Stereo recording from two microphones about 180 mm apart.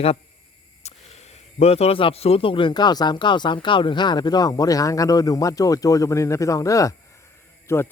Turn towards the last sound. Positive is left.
turn(degrees=15)  # may be behind; listen again after turning